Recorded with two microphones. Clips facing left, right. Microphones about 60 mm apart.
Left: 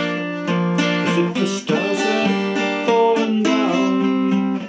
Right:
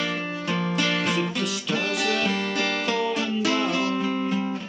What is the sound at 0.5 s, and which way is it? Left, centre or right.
Music, centre.